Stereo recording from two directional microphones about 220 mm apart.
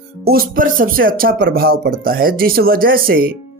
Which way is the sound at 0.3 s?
40° right (ahead or behind).